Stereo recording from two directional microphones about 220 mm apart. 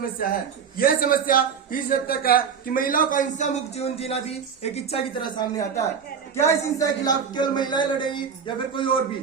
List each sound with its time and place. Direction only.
0.2 s a man's voice: 40° left (ahead or behind); by 9.0 s 25° left (ahead or behind)